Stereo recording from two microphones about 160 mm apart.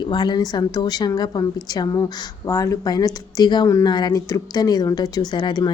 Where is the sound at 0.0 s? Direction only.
30° left (ahead or behind).